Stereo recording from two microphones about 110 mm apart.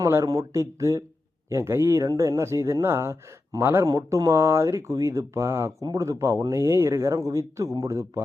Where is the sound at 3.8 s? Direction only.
35° right (ahead or behind).